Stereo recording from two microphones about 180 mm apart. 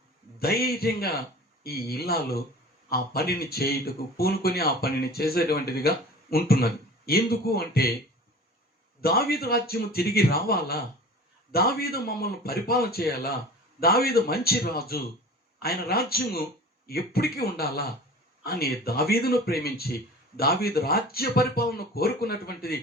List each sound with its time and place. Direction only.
0.3 s a man's voice: 60° left (ahead or behind)
9.0 s a man's voice: 60° left (ahead or behind)